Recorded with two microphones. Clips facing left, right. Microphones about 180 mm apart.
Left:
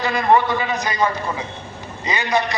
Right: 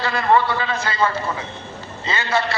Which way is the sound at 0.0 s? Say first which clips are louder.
Left 1 dB; 15° left (ahead or behind).